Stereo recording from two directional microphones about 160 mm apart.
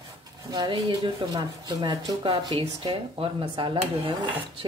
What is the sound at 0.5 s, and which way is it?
Speech, 30° right (ahead or behind).